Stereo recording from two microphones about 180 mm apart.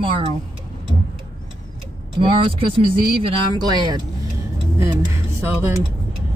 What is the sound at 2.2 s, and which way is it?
Speech, 30° right (ahead or behind).